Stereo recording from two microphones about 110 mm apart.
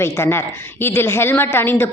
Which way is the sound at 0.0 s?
25° left (ahead or behind).